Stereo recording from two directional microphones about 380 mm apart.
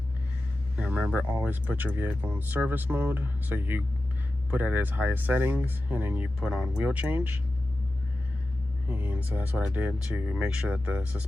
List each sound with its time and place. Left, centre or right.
0.8 s speech: centre
8.9 s speech: centre